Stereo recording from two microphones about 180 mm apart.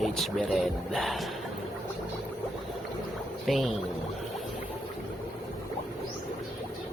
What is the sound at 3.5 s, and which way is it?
Speech, centre (ahead or behind).